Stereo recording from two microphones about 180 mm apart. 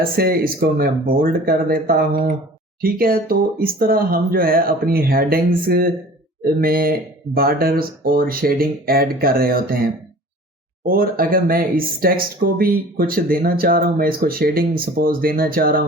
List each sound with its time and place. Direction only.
0.0 s speech: 55° right (ahead or behind)
10.8 s speech: 55° right (ahead or behind)